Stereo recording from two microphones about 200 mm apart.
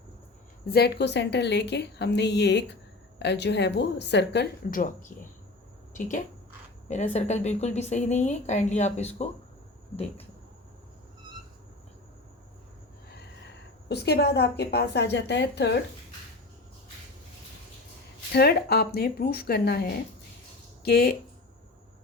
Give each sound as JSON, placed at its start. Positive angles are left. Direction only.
{"t": 0.7, "sound": "a woman's voice", "side_deg": 55}
{"t": 13.8, "sound": "a woman's voice", "side_deg": 55}
{"t": 18.3, "sound": "speech", "side_deg": 55}